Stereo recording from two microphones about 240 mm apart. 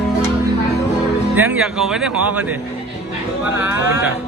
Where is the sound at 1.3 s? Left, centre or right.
Centre.